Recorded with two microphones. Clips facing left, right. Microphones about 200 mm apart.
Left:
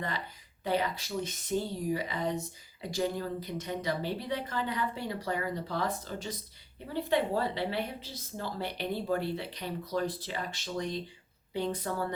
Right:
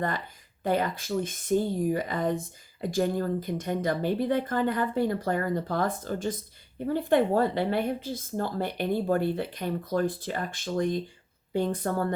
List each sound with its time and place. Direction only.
0.6 s speech: 50° right (ahead or behind)